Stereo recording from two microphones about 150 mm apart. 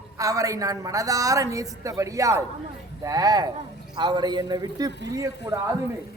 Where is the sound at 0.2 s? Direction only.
20° right (ahead or behind).